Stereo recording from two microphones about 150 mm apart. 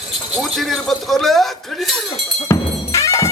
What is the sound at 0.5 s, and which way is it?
Speech, centre (ahead or behind).